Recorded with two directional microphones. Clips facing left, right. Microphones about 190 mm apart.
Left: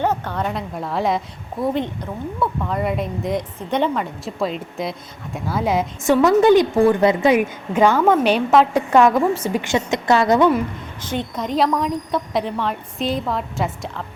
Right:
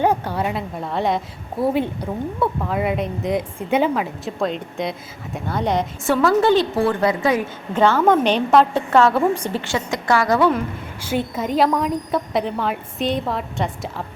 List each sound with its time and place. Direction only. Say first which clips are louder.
0.0 s a woman's voice: right 2 dB; 10° right (ahead or behind); by 5.8 s 5° left (ahead or behind)
6.1 s a woman's voice: left 3 dB; 15° left (ahead or behind)
9.2 s a woman's voice: even; 5° left (ahead or behind); by 10.5 s 20° left (ahead or behind)
11.0 s a woman's voice: right 2 dB; 5° right (ahead or behind)